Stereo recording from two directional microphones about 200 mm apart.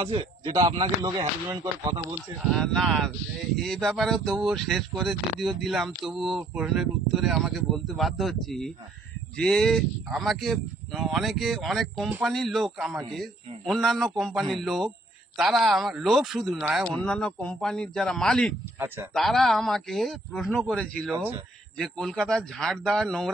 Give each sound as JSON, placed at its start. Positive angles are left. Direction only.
{"t": 0.0, "sound": "speech", "side_deg": -30}
{"t": 2.4, "sound": "speech", "side_deg": 0}